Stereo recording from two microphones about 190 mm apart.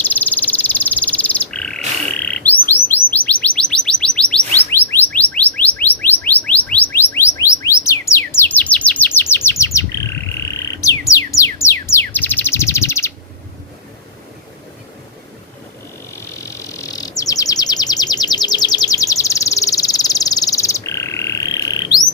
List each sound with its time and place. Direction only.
0.0 s frog: 10° left (ahead or behind)
2.1 s bird: 10° left (ahead or behind)
16.1 s bird: 15° left (ahead or behind)